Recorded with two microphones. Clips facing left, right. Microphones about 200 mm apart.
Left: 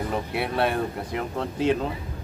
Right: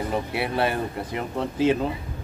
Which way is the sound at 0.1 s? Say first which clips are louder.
Right 1 dB; centre (ahead or behind).